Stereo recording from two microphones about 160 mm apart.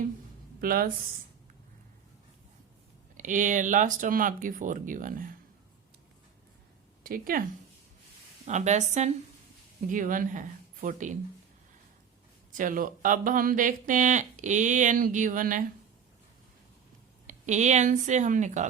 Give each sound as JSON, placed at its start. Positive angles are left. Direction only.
{"t": 0.6, "sound": "speech", "side_deg": -65}
{"t": 3.2, "sound": "speech", "side_deg": -55}
{"t": 7.0, "sound": "speech", "side_deg": -65}
{"t": 8.4, "sound": "speech", "side_deg": -45}
{"t": 12.5, "sound": "speech", "side_deg": -55}
{"t": 17.2, "sound": "speech", "side_deg": -50}